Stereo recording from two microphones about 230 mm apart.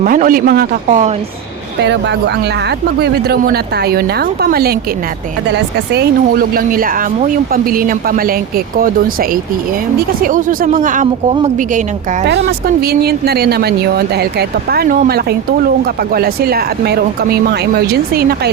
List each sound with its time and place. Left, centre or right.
0.0 s speech: right
1.8 s speech: right
6.5 s speech: right
10.2 s speech: right
12.5 s speech: right